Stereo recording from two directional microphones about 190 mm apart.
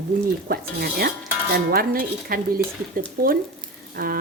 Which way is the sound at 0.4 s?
55° right (ahead or behind).